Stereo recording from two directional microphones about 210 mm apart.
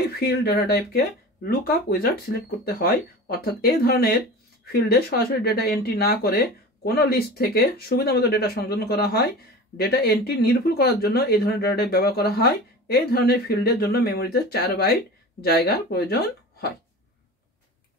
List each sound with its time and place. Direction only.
0.3 s speech: 50° left (ahead or behind)